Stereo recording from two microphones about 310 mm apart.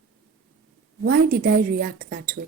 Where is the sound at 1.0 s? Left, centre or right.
Right.